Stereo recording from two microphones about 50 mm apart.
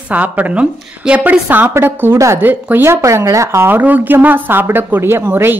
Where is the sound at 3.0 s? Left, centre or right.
Right.